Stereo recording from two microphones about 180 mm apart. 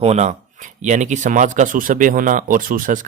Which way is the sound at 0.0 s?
40° right (ahead or behind).